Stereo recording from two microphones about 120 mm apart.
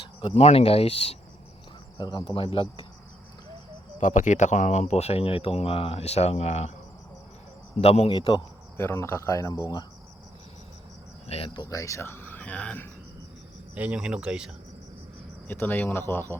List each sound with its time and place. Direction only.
0.2 s speech: 60° left (ahead or behind)
2.0 s speech: 40° left (ahead or behind)
4.0 s speech: 90° left; by 6.7 s 65° left (ahead or behind)
7.8 s speech: 55° left (ahead or behind)
8.1 s a man's voice: 40° left (ahead or behind)
8.8 s speech: 20° left (ahead or behind)
11.3 s speech: 55° left (ahead or behind)
11.5 s speech: 30° left (ahead or behind); by 12.9 s 10° left (ahead or behind)
13.7 s speech: 10° right (ahead or behind)
15.4 s speech: 15° left (ahead or behind)